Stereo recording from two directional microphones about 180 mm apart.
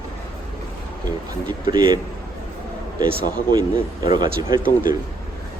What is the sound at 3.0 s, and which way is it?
Speech, 30° right (ahead or behind).